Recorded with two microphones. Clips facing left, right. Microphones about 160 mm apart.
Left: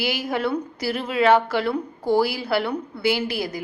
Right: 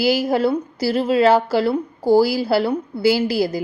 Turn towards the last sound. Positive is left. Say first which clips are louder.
# right 6 dB
turn(degrees=-30)  # may be behind; listen again after turning